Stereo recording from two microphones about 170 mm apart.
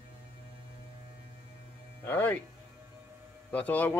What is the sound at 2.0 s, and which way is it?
Speech, 10° left (ahead or behind).